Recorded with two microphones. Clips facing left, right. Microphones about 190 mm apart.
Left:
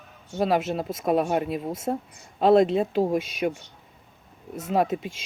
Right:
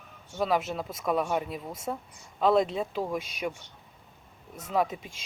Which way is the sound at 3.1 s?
90° left.